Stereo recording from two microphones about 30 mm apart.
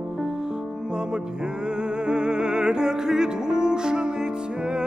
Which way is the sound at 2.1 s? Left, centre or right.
Right.